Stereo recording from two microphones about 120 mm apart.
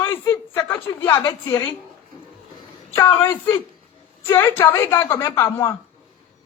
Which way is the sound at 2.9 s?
20° left (ahead or behind).